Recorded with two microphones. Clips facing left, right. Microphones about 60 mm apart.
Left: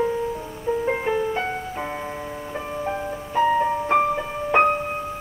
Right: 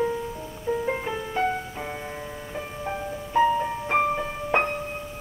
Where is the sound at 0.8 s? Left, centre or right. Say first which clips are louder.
Left 4 dB; left.